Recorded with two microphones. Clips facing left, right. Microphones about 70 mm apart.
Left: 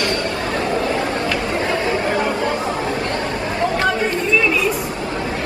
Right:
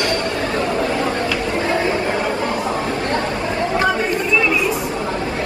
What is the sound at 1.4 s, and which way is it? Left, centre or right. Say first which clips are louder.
Chatter: right 1 dB; right.